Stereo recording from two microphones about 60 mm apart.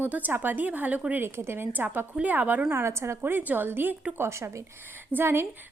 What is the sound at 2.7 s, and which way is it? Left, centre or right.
Speech, right.